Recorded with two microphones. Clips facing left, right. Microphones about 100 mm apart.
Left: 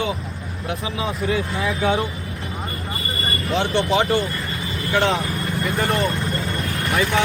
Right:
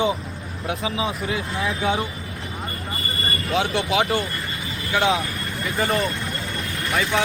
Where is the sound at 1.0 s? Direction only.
Centre (ahead or behind).